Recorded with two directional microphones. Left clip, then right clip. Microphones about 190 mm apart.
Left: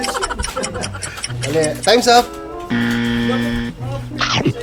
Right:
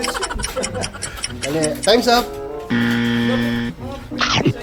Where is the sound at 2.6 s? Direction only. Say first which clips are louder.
Even; centre (ahead or behind).